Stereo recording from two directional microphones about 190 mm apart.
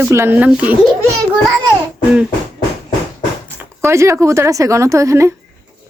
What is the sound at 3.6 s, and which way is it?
Speech, 15° right (ahead or behind).